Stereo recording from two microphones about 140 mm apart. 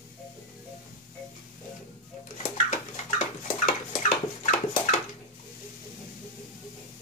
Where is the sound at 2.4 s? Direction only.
65° left (ahead or behind).